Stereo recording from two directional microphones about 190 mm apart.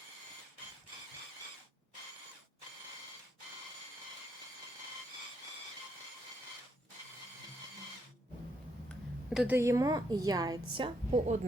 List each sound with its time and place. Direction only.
9.3 s a woman's voice: 5° right (ahead or behind)
9.6 s a woman's voice: 15° right (ahead or behind)